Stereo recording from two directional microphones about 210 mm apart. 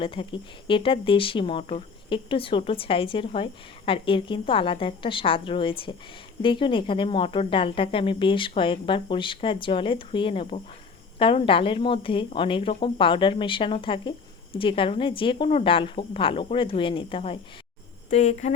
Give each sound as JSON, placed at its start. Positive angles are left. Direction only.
{"t": 0.0, "sound": "speech", "side_deg": 25}